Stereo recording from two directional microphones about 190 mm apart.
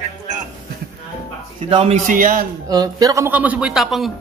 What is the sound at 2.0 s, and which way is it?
Speech, 45° right (ahead or behind).